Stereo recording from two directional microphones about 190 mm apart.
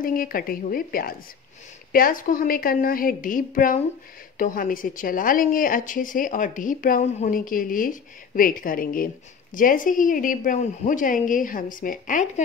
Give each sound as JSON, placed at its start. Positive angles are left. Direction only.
{"t": 0.0, "sound": "speech", "side_deg": 50}